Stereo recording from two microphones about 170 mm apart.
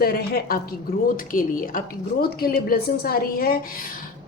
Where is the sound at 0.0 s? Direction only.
65° left (ahead or behind).